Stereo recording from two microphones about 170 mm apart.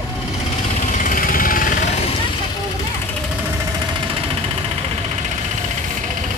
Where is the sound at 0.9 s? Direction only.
50° left (ahead or behind).